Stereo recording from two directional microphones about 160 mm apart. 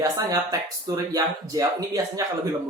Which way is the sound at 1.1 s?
20° right (ahead or behind).